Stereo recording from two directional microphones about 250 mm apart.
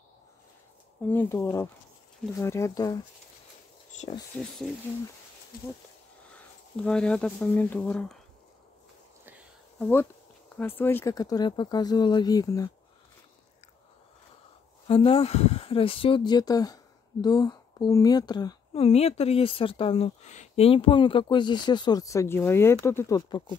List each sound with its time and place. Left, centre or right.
1.0 s speech: centre
6.3 s speech: centre
9.8 s speech: centre
14.9 s speech: left